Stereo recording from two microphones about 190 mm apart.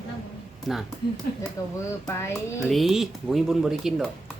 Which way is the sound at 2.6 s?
Centre (ahead or behind).